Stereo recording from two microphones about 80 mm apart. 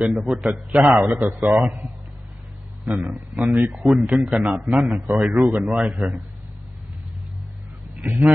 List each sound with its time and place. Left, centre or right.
0.1 s a man's voice: centre
8.0 s speech: right